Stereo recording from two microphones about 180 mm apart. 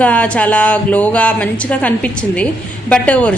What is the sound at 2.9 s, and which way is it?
Speech, 10° left (ahead or behind).